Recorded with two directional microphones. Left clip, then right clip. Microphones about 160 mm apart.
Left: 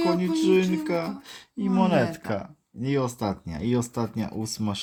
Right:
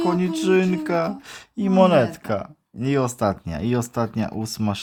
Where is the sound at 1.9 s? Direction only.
20° right (ahead or behind).